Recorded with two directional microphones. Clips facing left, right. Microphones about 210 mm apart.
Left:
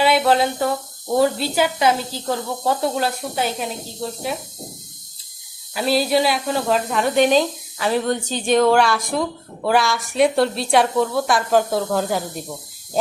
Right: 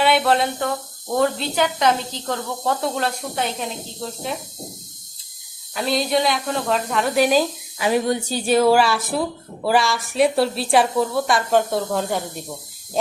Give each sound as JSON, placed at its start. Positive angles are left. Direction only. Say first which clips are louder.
{"t": 0.0, "sound": "a sound", "louder": "left 1 dB", "side_deg": 0}
{"t": 1.1, "sound": "speech", "louder": "left 2 dB", "side_deg": 5}
{"t": 5.7, "sound": "speech", "louder": "left 2 dB", "side_deg": 5}